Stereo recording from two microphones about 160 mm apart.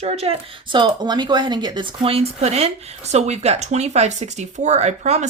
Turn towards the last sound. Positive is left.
turn(degrees=-45)  # may be behind; listen again after turning